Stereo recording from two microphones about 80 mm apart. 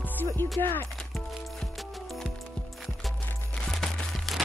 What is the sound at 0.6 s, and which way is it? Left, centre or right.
Speech, left.